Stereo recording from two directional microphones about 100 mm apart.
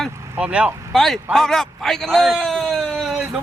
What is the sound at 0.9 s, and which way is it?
Speech, centre (ahead or behind).